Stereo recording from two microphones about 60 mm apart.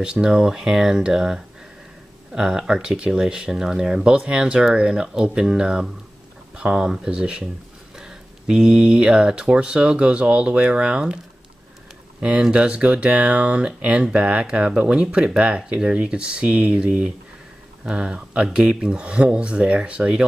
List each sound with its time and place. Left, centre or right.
0.0 s speech: centre
12.2 s speech: centre